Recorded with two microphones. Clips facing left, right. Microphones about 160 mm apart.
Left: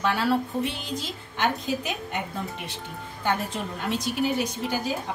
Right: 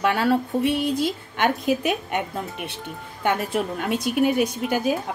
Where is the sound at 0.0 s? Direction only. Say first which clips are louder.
Right 3 dB; 60° right (ahead or behind).